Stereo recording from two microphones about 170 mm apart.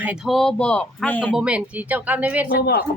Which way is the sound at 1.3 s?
5° right (ahead or behind).